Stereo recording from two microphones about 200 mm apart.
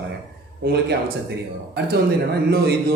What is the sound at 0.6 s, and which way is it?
Speech, 50° right (ahead or behind).